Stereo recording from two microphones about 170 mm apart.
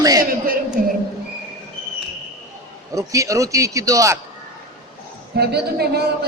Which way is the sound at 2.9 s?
20° right (ahead or behind).